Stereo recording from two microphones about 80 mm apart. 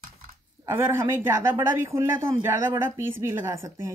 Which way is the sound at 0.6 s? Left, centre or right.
Right.